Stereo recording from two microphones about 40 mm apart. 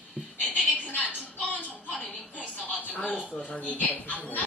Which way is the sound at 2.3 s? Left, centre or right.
Left.